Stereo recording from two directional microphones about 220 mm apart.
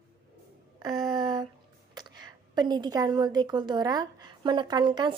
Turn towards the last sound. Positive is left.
turn(degrees=-20)  # may be behind; listen again after turning